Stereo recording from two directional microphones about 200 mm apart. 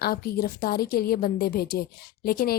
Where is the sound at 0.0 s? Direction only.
50° left (ahead or behind).